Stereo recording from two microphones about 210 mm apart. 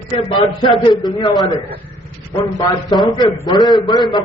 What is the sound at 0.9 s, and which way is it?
A man's voice, 20° left (ahead or behind).